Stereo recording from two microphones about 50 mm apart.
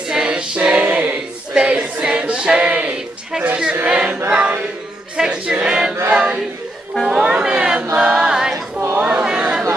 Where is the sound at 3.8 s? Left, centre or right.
Right.